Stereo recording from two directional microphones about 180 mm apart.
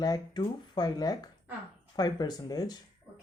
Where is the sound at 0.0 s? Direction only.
25° left (ahead or behind).